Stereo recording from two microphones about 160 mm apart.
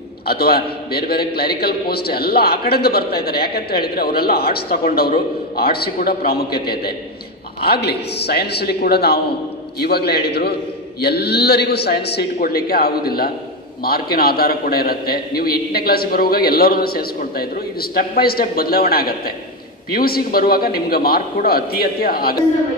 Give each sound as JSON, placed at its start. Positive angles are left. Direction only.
{"t": 0.3, "sound": "a man's voice", "side_deg": 75}